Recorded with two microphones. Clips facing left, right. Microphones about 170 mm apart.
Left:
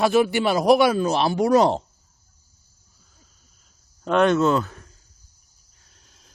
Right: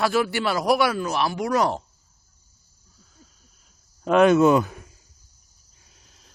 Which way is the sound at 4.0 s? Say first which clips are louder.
Right 2 dB; 5° right (ahead or behind).